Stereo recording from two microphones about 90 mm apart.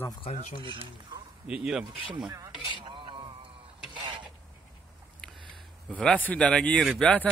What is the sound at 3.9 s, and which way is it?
Mechanisms, 60° right (ahead or behind).